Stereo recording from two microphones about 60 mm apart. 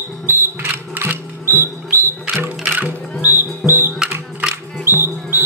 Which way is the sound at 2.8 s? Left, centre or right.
Right.